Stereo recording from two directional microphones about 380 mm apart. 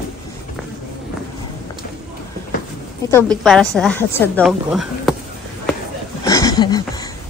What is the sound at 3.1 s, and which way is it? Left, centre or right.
A woman's voice, centre.